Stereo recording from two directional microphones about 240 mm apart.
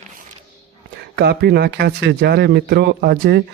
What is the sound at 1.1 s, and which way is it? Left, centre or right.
Speech, right.